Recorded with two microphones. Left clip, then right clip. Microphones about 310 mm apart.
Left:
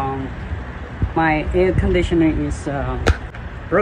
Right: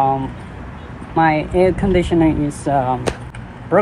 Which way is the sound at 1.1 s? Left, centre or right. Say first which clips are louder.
Right 3 dB; centre.